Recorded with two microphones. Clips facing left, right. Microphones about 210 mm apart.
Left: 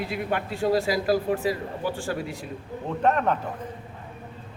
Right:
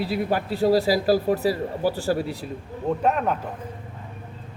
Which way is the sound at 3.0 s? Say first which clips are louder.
Left 2 dB; 5° right (ahead or behind).